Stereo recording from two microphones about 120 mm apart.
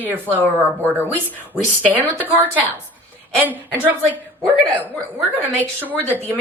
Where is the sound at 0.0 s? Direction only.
15° right (ahead or behind).